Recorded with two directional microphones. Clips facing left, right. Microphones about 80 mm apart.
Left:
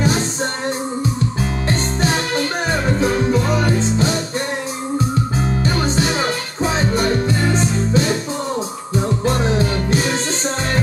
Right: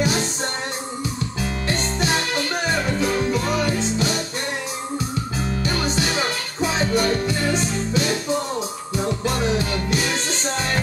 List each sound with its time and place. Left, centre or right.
3.0 s music: left
6.6 s music: left